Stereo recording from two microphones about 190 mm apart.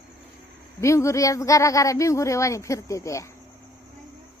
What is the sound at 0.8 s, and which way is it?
Speech, 15° left (ahead or behind).